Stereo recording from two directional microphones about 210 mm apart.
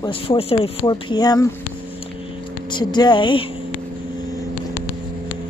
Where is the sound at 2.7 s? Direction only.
20° left (ahead or behind).